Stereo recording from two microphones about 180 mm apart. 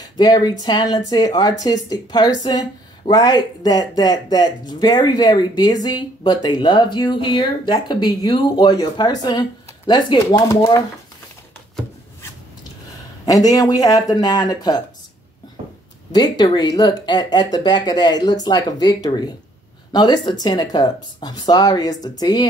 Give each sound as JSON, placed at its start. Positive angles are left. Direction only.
{"t": 0.0, "sound": "speech", "side_deg": 20}
{"t": 13.2, "sound": "speech", "side_deg": 20}
{"t": 16.1, "sound": "speech", "side_deg": 25}